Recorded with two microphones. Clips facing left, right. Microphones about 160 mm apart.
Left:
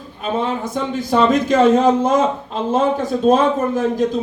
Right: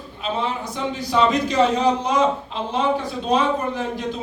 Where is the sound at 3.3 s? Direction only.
45° left (ahead or behind).